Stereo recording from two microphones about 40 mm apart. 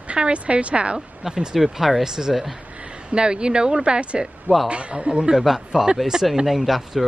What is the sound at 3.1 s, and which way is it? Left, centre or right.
Speech, right.